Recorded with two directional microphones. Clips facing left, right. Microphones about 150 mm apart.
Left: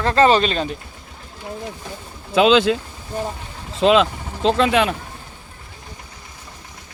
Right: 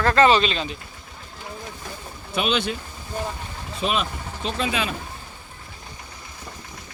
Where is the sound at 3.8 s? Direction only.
90° left; by 4.9 s 75° left (ahead or behind).